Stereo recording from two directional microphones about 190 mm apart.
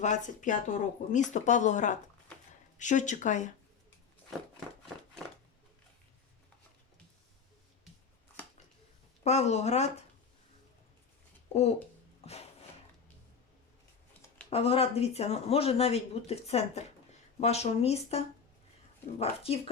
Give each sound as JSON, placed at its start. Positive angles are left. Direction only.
{"t": 0.0, "sound": "speech", "side_deg": 40}
{"t": 9.2, "sound": "speech", "side_deg": 35}
{"t": 12.2, "sound": "music", "side_deg": 35}
{"t": 14.5, "sound": "speech", "side_deg": 30}
{"t": 19.2, "sound": "speech", "side_deg": 30}